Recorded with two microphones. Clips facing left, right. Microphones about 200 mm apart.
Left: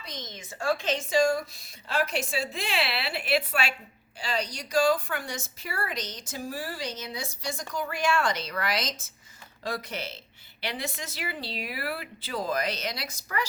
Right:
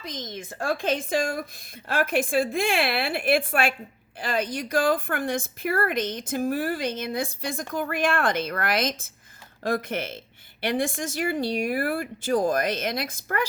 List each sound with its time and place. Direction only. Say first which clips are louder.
0.1 s a woman's voice: right 3 dB; 50° right (ahead or behind)